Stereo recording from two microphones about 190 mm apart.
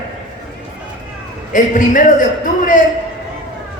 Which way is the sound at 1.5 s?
45° left (ahead or behind).